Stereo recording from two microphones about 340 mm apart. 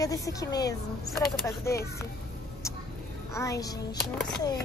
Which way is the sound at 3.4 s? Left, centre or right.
Centre.